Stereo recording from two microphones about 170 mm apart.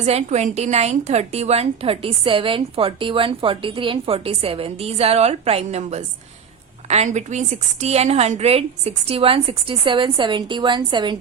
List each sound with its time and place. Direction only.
0.0 s a woman's voice: 40° right (ahead or behind)